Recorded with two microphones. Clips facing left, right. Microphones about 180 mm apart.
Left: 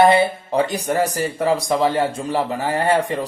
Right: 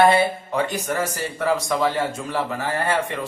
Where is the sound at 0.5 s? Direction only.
35° left (ahead or behind).